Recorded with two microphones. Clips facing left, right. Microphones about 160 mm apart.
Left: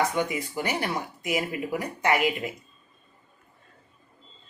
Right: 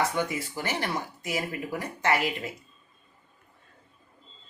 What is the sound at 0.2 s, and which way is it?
Speech, 15° left (ahead or behind).